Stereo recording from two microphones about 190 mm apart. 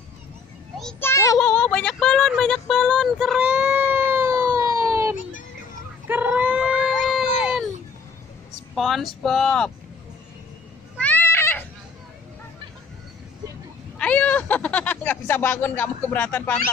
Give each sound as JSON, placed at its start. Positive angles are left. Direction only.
{"t": 0.7, "sound": "speech", "side_deg": 5}
{"t": 1.1, "sound": "child singing", "side_deg": 15}
{"t": 1.4, "sound": "a sound", "side_deg": 5}
{"t": 8.7, "sound": "speech", "side_deg": 0}
{"t": 11.0, "sound": "cat", "side_deg": 10}
{"t": 13.9, "sound": "speech", "side_deg": 5}